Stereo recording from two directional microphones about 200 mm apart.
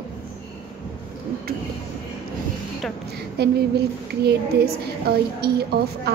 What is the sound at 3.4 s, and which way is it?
Speech, 55° right (ahead or behind).